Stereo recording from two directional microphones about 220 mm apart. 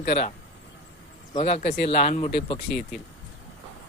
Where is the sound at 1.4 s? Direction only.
25° left (ahead or behind).